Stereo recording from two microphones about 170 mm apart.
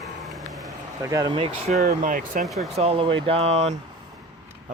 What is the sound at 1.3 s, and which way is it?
Speech, 35° right (ahead or behind).